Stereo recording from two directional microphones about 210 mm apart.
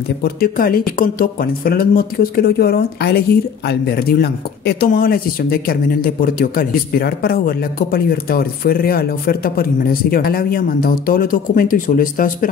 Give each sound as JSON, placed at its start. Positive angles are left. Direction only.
{"t": 0.2, "sound": "speech", "side_deg": 45}